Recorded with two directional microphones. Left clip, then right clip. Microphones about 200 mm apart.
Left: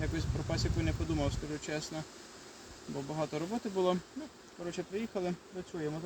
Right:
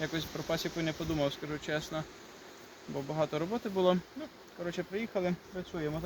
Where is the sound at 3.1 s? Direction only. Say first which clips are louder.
Right 4 dB; 5° left (ahead or behind).